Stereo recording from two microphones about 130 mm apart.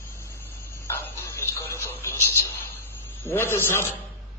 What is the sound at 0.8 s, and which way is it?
A man's voice, 20° left (ahead or behind).